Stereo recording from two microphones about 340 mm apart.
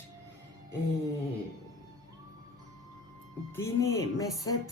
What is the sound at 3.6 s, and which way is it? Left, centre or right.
Speech, centre.